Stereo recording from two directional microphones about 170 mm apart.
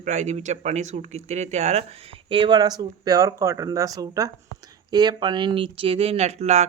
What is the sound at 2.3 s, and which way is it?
Speech, 30° right (ahead or behind).